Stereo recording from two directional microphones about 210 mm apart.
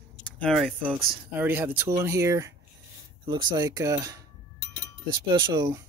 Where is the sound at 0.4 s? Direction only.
Centre (ahead or behind); by 5.9 s 15° right (ahead or behind).